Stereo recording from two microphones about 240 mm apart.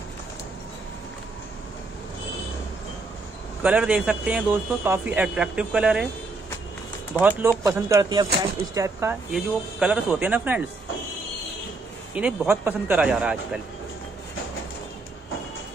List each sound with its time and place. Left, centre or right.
3.6 s a man's voice: centre
7.2 s a man's voice: centre
12.2 s a man's voice: centre